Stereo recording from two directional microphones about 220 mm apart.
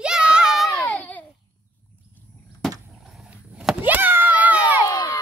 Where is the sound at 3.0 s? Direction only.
Centre (ahead or behind).